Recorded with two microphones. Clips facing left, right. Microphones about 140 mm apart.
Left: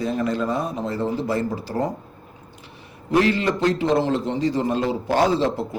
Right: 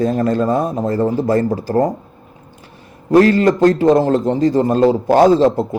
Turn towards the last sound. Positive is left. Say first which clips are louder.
# right 9 dB
turn(degrees=-45)  # may be behind; listen again after turning